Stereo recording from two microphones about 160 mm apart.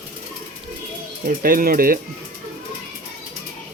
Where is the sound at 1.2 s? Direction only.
65° right (ahead or behind).